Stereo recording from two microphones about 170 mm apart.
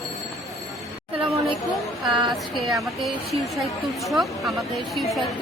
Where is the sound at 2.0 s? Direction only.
Centre (ahead or behind).